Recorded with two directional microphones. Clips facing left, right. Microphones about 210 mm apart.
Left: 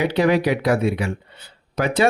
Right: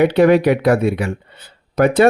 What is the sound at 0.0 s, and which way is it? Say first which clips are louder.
Speech: right 6 dB; 55° right (ahead or behind).